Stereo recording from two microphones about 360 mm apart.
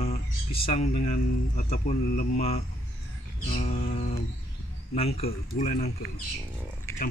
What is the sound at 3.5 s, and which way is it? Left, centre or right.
Music, centre.